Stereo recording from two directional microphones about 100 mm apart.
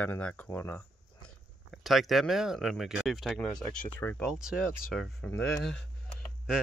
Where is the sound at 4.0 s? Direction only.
20° left (ahead or behind).